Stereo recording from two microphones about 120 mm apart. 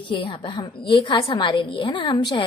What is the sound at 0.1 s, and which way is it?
A woman's voice, 45° left (ahead or behind).